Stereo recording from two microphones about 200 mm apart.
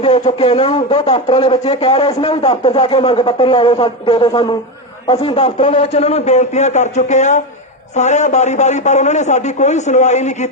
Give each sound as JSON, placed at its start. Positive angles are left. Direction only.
{"t": 0.0, "sound": "a man's voice", "side_deg": 30}